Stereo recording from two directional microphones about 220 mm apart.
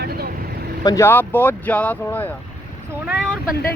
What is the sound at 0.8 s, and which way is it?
Speech, 15° left (ahead or behind).